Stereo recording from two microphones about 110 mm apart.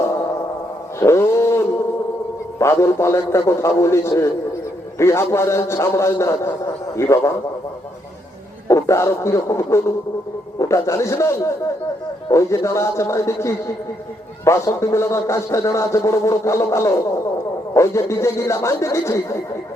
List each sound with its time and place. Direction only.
0.9 s a sound: 25° left (ahead or behind)
2.6 s a man's voice: 25° left (ahead or behind)
8.6 s a man's voice: 25° left (ahead or behind)